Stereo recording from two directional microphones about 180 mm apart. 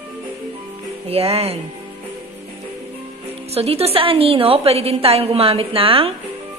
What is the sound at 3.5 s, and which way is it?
A woman's voice, 35° right (ahead or behind).